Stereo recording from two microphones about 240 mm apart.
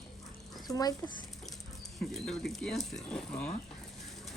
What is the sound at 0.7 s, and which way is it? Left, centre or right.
Speech, centre.